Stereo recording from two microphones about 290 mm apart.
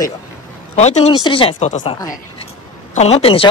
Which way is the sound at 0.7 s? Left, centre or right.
Left.